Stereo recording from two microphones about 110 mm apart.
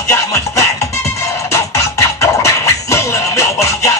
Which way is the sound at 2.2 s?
25° left (ahead or behind).